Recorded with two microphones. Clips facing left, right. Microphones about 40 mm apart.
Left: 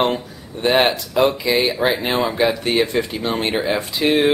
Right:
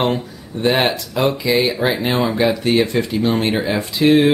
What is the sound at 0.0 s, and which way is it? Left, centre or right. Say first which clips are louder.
Speech: even; centre.